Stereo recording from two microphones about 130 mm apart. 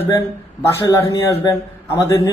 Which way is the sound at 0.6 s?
20° left (ahead or behind).